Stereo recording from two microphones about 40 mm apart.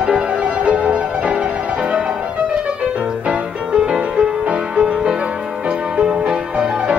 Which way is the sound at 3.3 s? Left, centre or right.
Centre.